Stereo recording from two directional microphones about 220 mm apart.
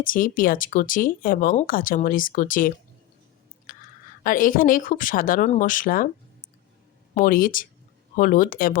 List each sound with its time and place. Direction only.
0.0 s speech: 40° left (ahead or behind)
3.7 s a sound: 35° left (ahead or behind)
4.2 s speech: 40° left (ahead or behind)
7.1 s speech: 40° left (ahead or behind)